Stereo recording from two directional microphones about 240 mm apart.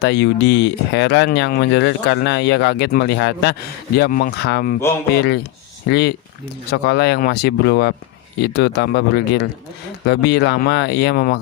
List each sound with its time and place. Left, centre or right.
0.0 s speech: left